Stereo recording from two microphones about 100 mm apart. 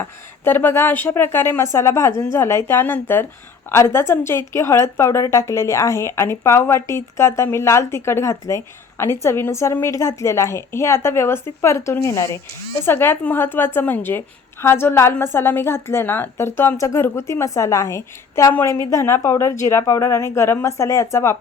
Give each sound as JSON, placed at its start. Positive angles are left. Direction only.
{"t": 0.0, "sound": "a woman's voice", "side_deg": 20}